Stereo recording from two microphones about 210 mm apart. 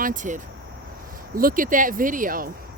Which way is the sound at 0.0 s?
35° right (ahead or behind).